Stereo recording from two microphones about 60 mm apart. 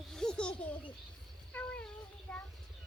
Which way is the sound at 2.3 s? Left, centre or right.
Centre.